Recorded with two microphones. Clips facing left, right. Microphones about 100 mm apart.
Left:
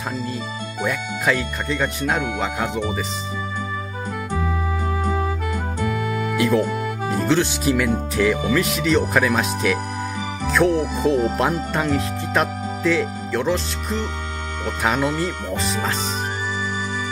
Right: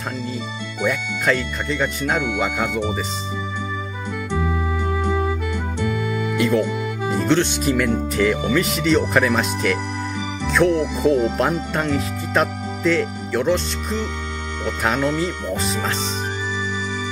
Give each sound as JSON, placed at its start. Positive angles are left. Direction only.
{"t": 0.8, "sound": "speech", "side_deg": 0}
{"t": 4.3, "sound": "organ", "side_deg": 45}
{"t": 5.8, "sound": "music", "side_deg": 45}
{"t": 6.3, "sound": "speech", "side_deg": 0}